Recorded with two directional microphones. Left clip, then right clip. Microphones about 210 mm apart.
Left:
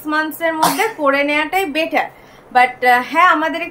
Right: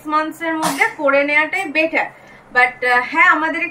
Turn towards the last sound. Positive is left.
turn(degrees=15)  # may be behind; listen again after turning